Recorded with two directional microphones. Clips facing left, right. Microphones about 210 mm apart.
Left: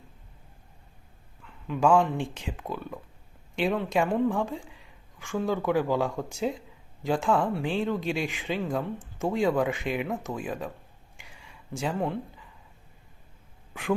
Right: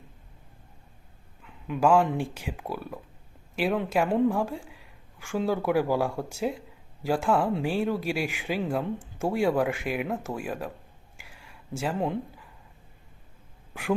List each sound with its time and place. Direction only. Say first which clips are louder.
1.4 s dog: even; 15° right (ahead or behind)
1.8 s speech: even; 5° right (ahead or behind)
11.2 s a sound: even; 5° right (ahead or behind)
11.9 s speech: right 2 dB; 20° right (ahead or behind)